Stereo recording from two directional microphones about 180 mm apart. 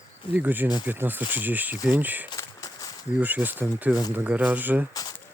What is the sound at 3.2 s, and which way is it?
Speech, 10° right (ahead or behind).